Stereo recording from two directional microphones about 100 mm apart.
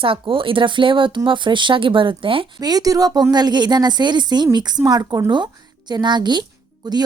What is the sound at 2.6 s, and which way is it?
A woman's voice, 40° right (ahead or behind).